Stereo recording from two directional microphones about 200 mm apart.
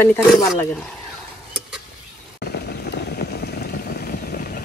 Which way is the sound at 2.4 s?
50° left (ahead or behind).